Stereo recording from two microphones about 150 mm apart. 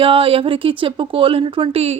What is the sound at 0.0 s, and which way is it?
Speech, 40° right (ahead or behind).